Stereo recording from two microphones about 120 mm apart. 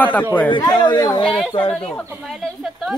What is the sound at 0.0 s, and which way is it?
Speech, 15° left (ahead or behind).